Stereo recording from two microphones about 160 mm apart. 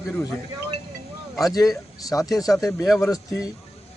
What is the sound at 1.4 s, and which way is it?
Speech, 20° left (ahead or behind).